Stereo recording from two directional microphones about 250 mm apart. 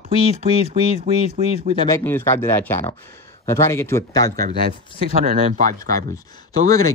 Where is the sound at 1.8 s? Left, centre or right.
Centre.